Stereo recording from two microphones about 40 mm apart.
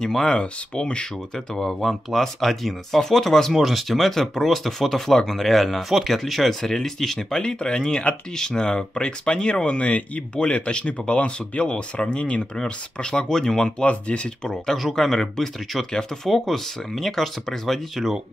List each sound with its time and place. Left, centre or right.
0.0 s speech: centre
9.8 s speech: left
10.3 s speech: left
13.8 s speech: left; by 18.1 s centre